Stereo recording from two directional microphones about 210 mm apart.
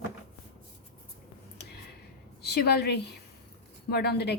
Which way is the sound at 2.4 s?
50° left (ahead or behind).